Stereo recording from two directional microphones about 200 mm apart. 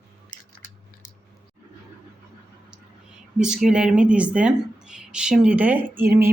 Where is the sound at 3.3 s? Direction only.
5° right (ahead or behind).